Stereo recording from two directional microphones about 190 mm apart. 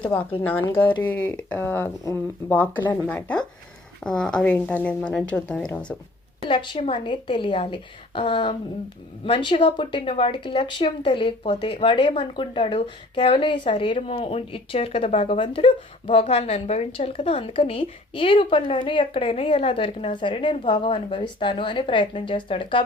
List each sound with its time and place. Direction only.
0.2 s speech: 30° left (ahead or behind)
0.7 s speech: 10° left (ahead or behind)
6.5 s speech: 25° left (ahead or behind)